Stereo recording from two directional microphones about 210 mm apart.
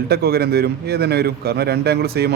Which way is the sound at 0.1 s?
50° right (ahead or behind).